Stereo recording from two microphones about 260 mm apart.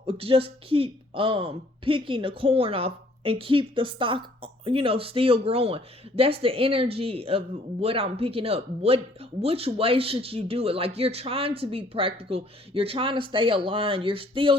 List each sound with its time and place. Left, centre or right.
0.0 s a woman's voice: right